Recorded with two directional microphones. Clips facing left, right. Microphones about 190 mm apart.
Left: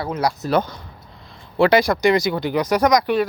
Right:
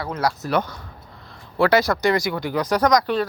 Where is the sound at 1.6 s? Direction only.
15° left (ahead or behind).